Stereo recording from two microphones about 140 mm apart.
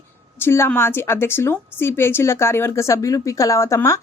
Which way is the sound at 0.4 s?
15° left (ahead or behind).